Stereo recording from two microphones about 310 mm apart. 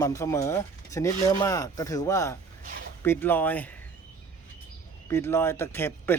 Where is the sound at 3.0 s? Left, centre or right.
Centre.